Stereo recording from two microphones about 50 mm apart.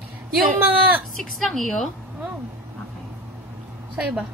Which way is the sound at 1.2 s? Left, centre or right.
Centre.